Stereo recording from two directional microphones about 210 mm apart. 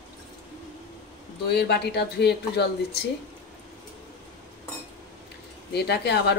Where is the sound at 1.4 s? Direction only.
50° left (ahead or behind).